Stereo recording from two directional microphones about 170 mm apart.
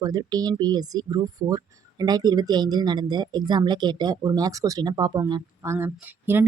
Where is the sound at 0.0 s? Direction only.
20° right (ahead or behind).